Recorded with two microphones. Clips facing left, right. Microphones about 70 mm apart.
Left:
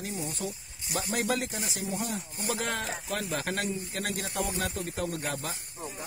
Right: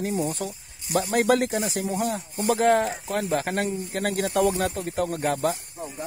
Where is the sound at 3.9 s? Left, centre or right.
Right.